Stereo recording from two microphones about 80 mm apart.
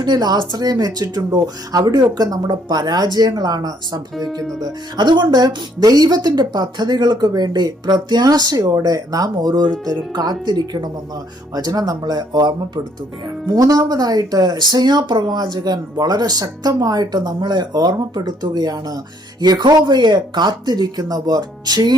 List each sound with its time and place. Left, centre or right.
0.0 s speech: right
11.5 s speech: right
13.6 s speech: right